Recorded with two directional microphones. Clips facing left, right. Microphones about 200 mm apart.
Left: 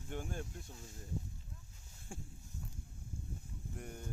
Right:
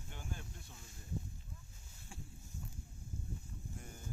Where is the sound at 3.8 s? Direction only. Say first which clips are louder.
Left 5 dB; 60° left (ahead or behind).